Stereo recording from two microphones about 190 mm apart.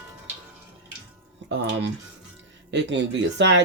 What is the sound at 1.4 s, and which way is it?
Speech, 70° right (ahead or behind).